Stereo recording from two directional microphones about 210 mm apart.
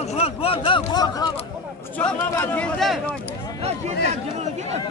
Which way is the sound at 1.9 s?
10° left (ahead or behind).